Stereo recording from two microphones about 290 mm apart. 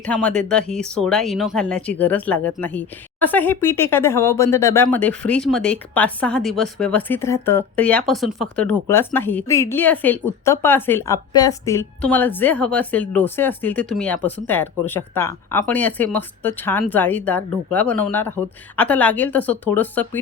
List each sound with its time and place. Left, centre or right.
0.0 s speech: centre